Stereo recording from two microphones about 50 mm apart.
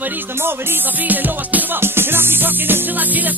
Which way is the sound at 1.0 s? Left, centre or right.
Right.